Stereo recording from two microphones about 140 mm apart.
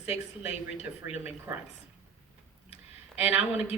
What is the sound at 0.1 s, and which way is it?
A woman's voice, 10° right (ahead or behind).